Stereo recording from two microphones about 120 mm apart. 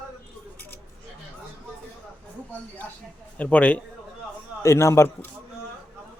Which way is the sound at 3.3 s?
10° left (ahead or behind).